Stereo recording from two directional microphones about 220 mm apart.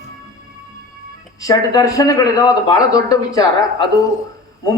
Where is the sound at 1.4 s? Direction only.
15° left (ahead or behind).